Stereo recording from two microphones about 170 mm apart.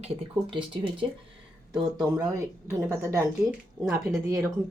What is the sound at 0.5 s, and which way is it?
Speech, 30° right (ahead or behind).